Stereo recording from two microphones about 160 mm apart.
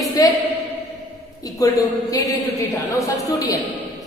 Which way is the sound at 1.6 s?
20° left (ahead or behind).